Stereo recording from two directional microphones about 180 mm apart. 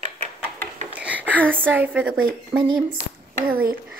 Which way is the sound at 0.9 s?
10° right (ahead or behind).